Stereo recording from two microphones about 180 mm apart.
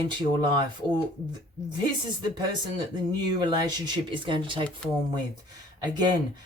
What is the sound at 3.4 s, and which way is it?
Speech, 25° right (ahead or behind).